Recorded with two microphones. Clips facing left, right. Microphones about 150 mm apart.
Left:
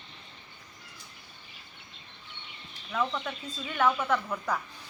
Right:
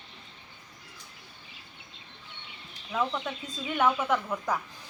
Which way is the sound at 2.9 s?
15° right (ahead or behind).